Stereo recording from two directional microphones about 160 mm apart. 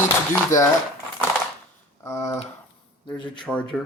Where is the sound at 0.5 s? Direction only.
55° left (ahead or behind).